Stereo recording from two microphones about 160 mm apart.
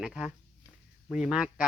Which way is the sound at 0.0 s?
Centre (ahead or behind).